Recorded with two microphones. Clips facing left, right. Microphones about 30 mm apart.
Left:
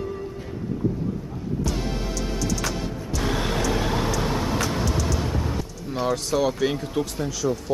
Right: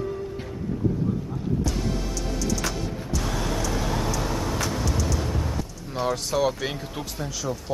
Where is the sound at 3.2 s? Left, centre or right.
Left.